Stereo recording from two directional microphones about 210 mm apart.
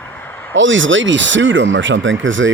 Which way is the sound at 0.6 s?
65° right (ahead or behind).